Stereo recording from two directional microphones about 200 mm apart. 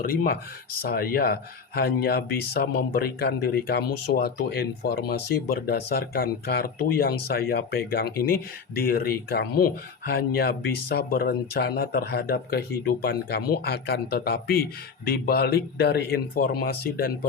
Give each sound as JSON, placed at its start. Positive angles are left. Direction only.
{"t": 0.0, "sound": "speech", "side_deg": 45}